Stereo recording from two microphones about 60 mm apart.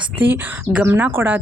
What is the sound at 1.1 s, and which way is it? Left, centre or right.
Speech, right.